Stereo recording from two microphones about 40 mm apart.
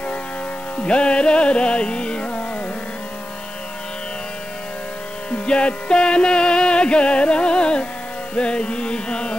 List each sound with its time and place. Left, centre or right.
0.7 s carnatic music: left
5.3 s music: left
8.4 s carnatic music: left